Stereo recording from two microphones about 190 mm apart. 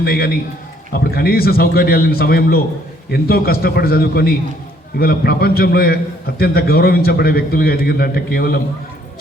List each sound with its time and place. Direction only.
0.0 s a man's voice: 55° left (ahead or behind)